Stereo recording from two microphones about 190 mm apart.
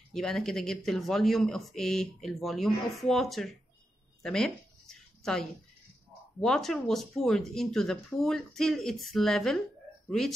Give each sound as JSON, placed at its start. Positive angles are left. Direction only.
{"t": 0.1, "sound": "speech", "side_deg": 0}
{"t": 4.2, "sound": "a sound", "side_deg": 5}
{"t": 6.4, "sound": "speech", "side_deg": 0}